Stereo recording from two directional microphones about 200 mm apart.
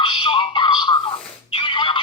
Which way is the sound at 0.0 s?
25° left (ahead or behind).